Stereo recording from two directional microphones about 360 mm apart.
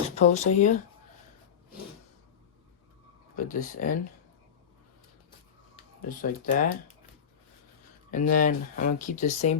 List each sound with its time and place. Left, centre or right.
0.2 s speech: centre
3.3 s speech: left
5.7 s speech: left
8.1 s speech: left